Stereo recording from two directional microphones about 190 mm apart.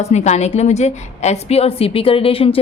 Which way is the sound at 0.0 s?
35° left (ahead or behind).